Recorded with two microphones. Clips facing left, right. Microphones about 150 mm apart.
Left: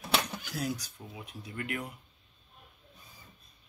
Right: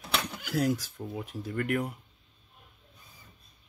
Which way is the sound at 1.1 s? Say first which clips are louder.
Right 8 dB; 50° right (ahead or behind).